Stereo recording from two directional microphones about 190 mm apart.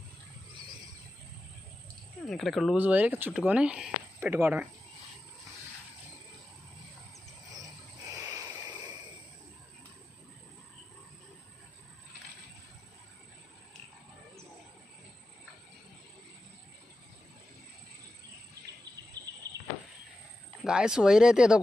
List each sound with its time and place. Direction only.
2.2 s speech: centre (ahead or behind)
8.2 s a sound: 20° right (ahead or behind)
20.7 s speech: 5° right (ahead or behind)